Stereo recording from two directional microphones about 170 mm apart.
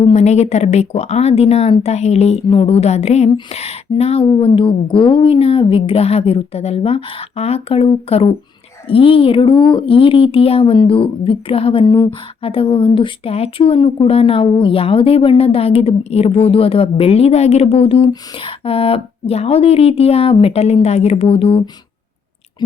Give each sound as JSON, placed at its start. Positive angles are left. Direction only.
{"t": 0.0, "sound": "speech", "side_deg": 40}